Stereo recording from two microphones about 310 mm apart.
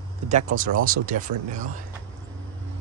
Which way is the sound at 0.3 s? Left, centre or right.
Right.